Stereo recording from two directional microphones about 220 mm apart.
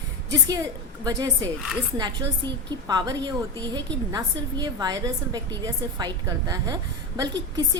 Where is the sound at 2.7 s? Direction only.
15° right (ahead or behind).